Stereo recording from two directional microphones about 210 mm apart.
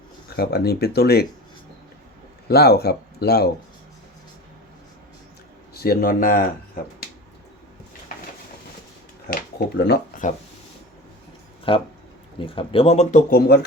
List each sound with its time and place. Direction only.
0.3 s speech: 50° left (ahead or behind)
2.5 s speech: 50° left (ahead or behind)
5.7 s speech: 45° left (ahead or behind)
9.2 s speech: 45° left (ahead or behind)
11.7 s speech: 25° left (ahead or behind); by 13.7 s 45° left (ahead or behind)